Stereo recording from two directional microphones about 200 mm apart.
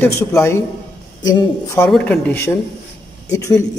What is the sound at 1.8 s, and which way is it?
Speech, 5° left (ahead or behind).